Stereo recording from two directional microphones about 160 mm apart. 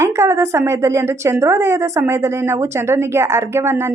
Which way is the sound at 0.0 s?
15° right (ahead or behind).